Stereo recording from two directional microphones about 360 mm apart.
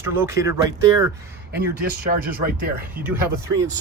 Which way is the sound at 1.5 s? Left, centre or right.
Right.